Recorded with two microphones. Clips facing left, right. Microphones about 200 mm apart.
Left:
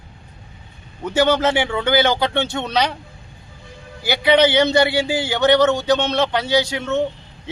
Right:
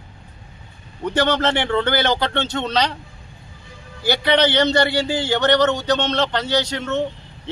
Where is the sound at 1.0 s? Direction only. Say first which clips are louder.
Left 2 dB; 10° left (ahead or behind).